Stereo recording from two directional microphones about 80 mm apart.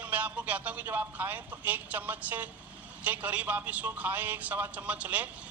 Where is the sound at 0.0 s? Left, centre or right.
Centre.